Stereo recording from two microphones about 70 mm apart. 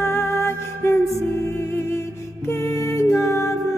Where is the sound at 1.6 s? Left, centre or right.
Left.